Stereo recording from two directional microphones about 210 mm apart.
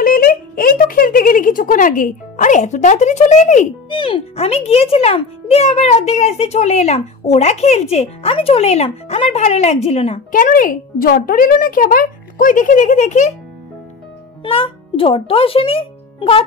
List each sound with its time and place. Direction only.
0.0 s speech: 45° left (ahead or behind)
10.3 s speech: 40° left (ahead or behind)
14.4 s a child's voice: 25° left (ahead or behind)